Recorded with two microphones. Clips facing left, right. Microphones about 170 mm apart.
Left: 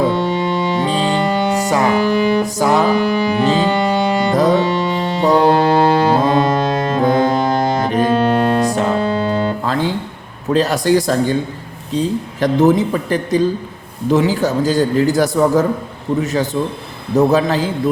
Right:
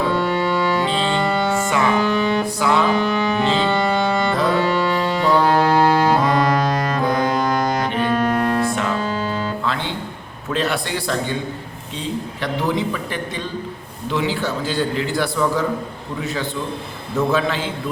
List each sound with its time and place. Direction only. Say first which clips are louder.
0.1 s organ: left 2 dB; 20° left (ahead or behind)
0.9 s music: left 4 dB; 40° left (ahead or behind)
1.3 s music: left 3 dB; 15° left (ahead or behind)
1.5 s music: left 4 dB; 40° left (ahead or behind)
2.0 s music: left 4 dB; 15° left (ahead or behind)
2.6 s music: left 3 dB; 40° left (ahead or behind)
3.7 s music: left 3 dB; 15° left (ahead or behind)
7.9 s music: left 5 dB; 40° left (ahead or behind)
10.5 s a man's voice: left 9 dB; 40° left (ahead or behind)